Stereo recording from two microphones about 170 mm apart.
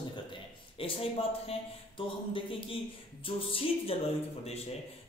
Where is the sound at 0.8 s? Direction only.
35° left (ahead or behind).